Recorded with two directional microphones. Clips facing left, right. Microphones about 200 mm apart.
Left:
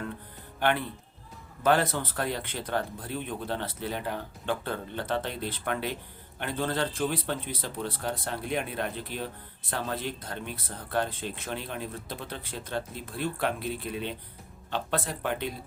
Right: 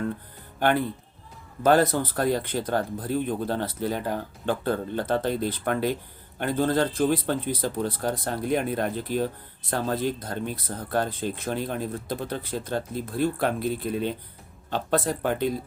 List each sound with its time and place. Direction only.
0.6 s speech: 40° right (ahead or behind)